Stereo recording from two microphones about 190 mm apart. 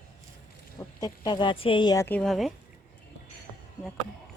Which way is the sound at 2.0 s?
5° left (ahead or behind).